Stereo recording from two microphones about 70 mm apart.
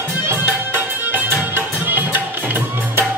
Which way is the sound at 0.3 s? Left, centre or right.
Right.